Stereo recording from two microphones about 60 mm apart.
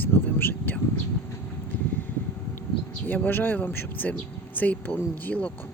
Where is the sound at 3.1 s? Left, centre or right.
Left.